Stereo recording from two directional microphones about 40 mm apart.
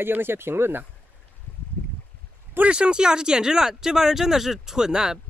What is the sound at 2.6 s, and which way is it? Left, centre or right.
Speech, right.